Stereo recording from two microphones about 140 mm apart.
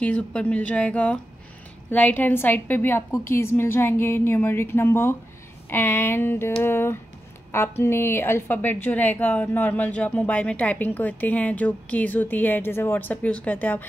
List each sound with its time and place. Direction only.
0.0 s a woman's voice: 10° left (ahead or behind)